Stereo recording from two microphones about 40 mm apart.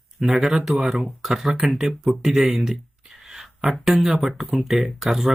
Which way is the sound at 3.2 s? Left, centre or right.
Centre.